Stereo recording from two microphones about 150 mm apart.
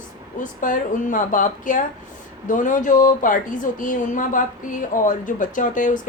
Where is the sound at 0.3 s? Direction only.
60° left (ahead or behind).